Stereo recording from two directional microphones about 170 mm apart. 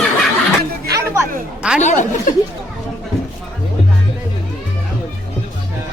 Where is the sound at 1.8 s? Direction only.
45° left (ahead or behind).